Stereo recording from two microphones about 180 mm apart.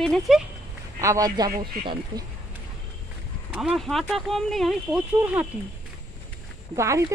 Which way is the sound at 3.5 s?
5° right (ahead or behind).